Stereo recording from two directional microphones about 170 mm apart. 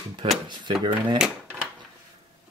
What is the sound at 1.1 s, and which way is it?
Drawer open or close, 5° right (ahead or behind).